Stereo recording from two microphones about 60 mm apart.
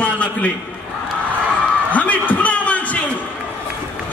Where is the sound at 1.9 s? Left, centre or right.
Left.